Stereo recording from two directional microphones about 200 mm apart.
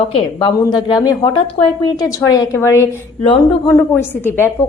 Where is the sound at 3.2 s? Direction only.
25° left (ahead or behind).